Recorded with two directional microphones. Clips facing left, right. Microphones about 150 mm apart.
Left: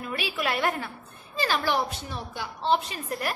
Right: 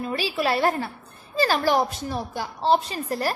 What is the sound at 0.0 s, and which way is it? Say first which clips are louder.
A woman's voice: right 5 dB; 30° right (ahead or behind).